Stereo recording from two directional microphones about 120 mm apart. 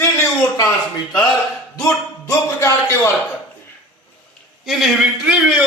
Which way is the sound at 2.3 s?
25° left (ahead or behind).